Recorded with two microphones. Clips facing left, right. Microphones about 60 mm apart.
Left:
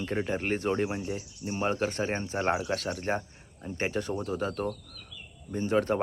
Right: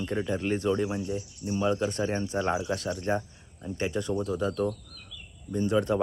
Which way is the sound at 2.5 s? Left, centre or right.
Left.